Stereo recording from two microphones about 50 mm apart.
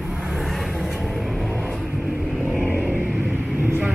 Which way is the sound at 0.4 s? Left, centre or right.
Centre.